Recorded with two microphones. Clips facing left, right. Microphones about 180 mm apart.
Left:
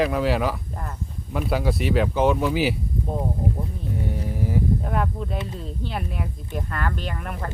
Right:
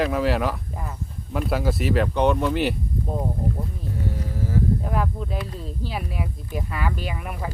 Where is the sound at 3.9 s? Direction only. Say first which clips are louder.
Left 1 dB; 20° left (ahead or behind).